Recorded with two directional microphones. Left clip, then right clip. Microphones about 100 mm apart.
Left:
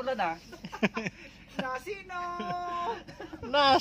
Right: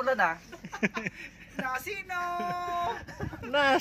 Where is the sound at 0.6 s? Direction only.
25° left (ahead or behind).